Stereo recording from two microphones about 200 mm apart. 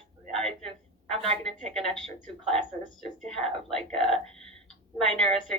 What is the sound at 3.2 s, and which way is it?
A woman's voice, 5° left (ahead or behind).